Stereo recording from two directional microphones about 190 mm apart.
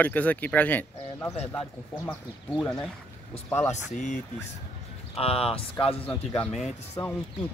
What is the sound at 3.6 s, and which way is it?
Speech, 40° left (ahead or behind).